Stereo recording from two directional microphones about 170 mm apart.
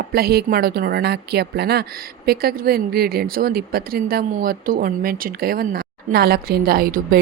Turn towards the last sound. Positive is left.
turn(degrees=-60)  # may be behind; listen again after turning